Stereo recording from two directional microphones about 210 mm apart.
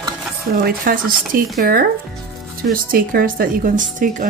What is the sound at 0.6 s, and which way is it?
Speech, 40° right (ahead or behind).